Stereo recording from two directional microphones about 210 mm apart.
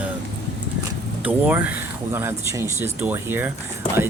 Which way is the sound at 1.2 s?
5° right (ahead or behind).